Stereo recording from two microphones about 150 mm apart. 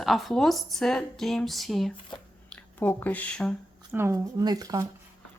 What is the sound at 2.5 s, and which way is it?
Speech, 10° left (ahead or behind).